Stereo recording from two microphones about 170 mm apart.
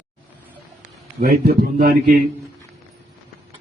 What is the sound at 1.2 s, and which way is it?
Speech, 60° right (ahead or behind).